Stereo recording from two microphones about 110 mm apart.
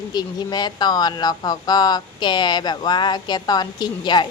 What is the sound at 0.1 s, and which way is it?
Speech, 40° left (ahead or behind).